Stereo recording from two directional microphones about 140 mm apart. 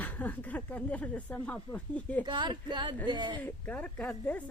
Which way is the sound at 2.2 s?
35° right (ahead or behind).